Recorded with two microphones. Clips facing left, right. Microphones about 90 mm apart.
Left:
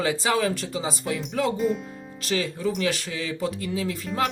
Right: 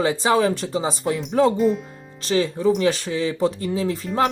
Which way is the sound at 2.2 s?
25° right (ahead or behind).